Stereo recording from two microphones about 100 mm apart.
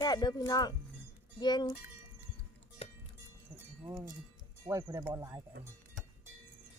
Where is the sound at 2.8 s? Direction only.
85° left.